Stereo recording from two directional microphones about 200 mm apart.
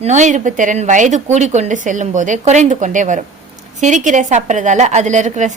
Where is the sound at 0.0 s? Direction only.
35° right (ahead or behind).